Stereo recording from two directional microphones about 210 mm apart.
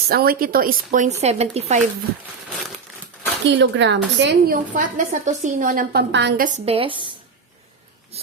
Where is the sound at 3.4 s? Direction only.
60° right (ahead or behind); by 6.0 s 40° right (ahead or behind).